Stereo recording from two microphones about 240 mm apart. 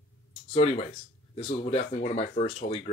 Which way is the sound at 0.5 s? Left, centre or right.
Left.